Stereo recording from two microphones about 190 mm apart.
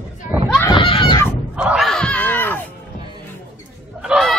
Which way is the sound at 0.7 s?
25° left (ahead or behind).